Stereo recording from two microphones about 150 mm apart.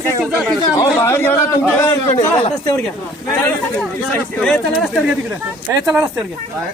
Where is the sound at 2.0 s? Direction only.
45° left (ahead or behind).